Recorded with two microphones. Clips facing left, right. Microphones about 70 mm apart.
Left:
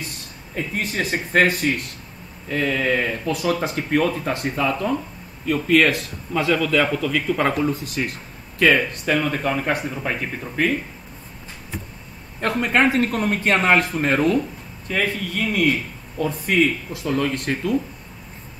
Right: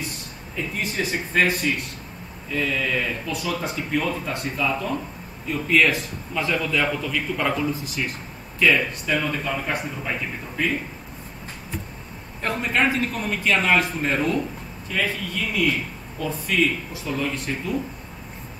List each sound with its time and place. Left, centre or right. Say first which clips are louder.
0.7 s a man's voice: left 2 dB; left
12.4 s a man's voice: left 4 dB; left